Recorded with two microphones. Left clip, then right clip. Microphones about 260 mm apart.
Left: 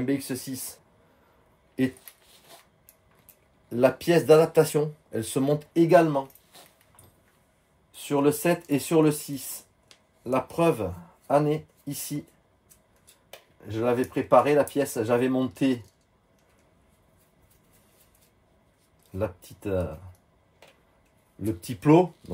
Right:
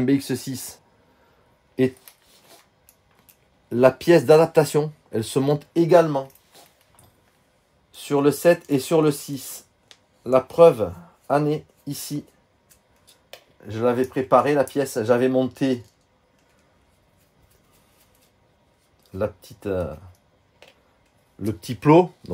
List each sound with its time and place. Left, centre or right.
0.0 s speech: right
3.6 s speech: right
7.9 s speech: right
13.7 s speech: right
19.1 s speech: right
21.6 s speech: right